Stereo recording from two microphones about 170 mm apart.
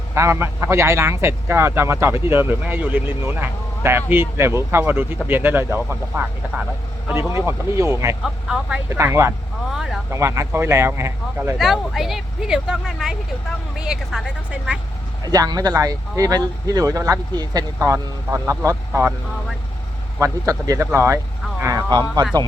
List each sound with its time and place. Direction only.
0.1 s a man's voice: 15° right (ahead or behind)
8.2 s speech: 5° right (ahead or behind)
8.9 s a man's voice: 15° right (ahead or behind)
11.5 s speech: centre (ahead or behind)
15.3 s speech: 20° right (ahead or behind)
20.1 s a man's voice: 15° right (ahead or behind)